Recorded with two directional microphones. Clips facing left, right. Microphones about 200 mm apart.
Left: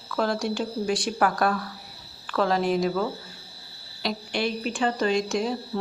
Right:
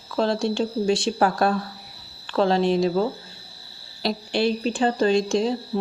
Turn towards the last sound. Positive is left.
turn(degrees=-25)  # may be behind; listen again after turning